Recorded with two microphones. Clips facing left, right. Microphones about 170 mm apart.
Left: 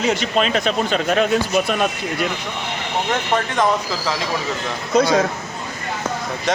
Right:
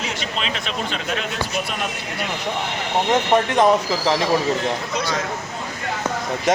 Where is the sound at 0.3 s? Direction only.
45° left (ahead or behind).